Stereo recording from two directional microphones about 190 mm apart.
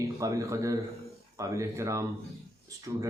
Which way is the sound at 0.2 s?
15° right (ahead or behind).